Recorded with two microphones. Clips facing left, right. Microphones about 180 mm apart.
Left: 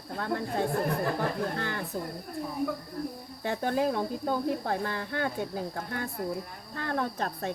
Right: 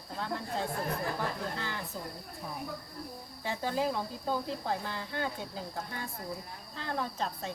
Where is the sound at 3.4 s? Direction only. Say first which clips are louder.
Left 4 dB; 60° left (ahead or behind).